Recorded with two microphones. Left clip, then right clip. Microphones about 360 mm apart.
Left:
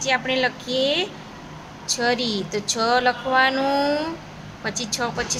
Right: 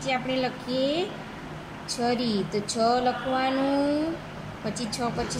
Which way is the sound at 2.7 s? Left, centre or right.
Left.